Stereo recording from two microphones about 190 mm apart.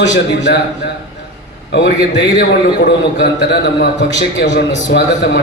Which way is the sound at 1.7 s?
65° left (ahead or behind).